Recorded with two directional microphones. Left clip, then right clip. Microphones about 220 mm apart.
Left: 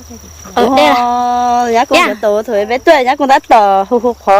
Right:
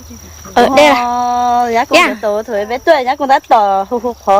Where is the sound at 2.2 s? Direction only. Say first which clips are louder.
Left 3 dB; 45° left (ahead or behind).